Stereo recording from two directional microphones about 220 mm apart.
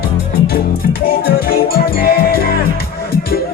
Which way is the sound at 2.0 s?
45° left (ahead or behind).